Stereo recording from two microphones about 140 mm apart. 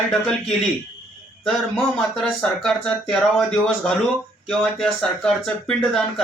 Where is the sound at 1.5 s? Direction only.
Centre (ahead or behind).